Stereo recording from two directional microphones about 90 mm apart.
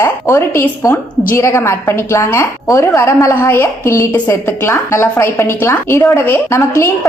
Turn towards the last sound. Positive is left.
turn(degrees=25)  # may be behind; listen again after turning